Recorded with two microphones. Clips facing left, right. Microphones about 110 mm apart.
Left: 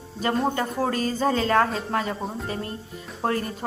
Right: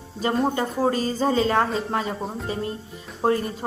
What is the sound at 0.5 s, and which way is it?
Speech, 20° right (ahead or behind).